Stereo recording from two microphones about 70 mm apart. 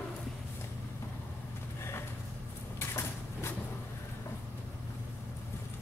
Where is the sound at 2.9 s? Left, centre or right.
Left.